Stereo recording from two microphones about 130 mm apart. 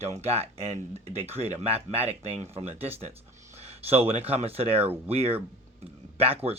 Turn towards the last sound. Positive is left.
turn(degrees=-50)  # may be behind; listen again after turning